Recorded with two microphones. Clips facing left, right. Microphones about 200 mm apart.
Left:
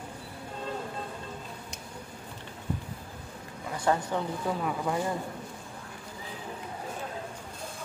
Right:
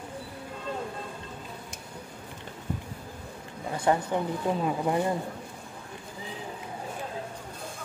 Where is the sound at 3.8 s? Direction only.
15° right (ahead or behind).